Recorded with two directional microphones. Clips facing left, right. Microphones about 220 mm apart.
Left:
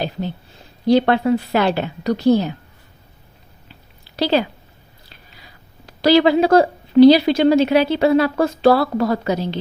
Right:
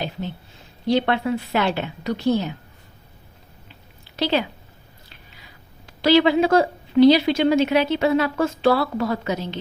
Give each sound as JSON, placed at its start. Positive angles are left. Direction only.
{"t": 0.9, "sound": "a woman's voice", "side_deg": 40}
{"t": 4.2, "sound": "a woman's voice", "side_deg": 35}
{"t": 5.8, "sound": "a woman's voice", "side_deg": 40}